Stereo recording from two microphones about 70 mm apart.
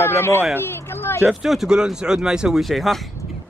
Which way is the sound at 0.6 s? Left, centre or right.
Left.